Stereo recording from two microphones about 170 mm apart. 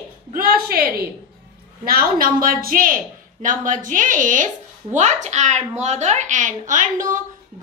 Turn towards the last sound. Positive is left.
turn(degrees=-50)  # may be behind; listen again after turning